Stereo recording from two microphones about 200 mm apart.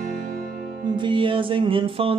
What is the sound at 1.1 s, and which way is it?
Music, 25° right (ahead or behind).